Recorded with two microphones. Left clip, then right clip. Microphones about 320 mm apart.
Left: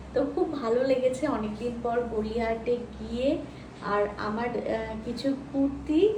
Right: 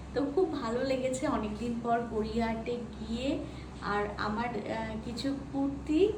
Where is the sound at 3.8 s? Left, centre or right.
Centre.